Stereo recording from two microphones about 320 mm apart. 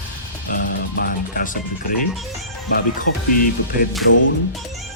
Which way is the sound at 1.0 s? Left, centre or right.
Left.